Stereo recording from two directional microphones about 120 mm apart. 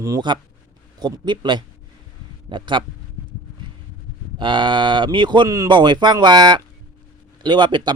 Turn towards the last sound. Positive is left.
turn(degrees=-40)  # may be behind; listen again after turning